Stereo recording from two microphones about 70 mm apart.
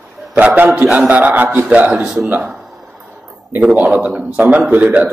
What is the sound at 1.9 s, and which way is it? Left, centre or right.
Speech, centre.